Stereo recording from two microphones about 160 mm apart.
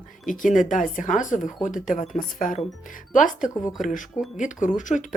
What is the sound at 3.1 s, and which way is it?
Speech, 55° left (ahead or behind).